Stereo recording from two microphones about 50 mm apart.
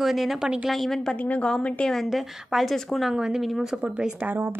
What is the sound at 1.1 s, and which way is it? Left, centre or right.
Speech, left.